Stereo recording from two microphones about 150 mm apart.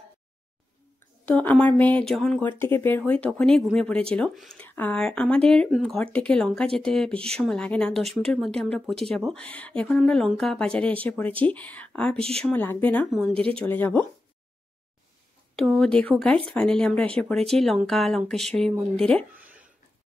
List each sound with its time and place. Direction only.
1.2 s speech: 10° left (ahead or behind)
2.4 s speech: 15° left (ahead or behind)
12.2 s speech: 40° right (ahead or behind)
12.4 s speech: 10° left (ahead or behind)
15.5 s speech: centre (ahead or behind)
19.3 s a sound: 10° right (ahead or behind)